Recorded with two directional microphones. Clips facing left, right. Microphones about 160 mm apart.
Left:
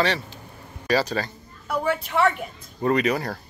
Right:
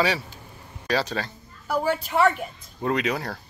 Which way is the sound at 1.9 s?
Centre (ahead or behind).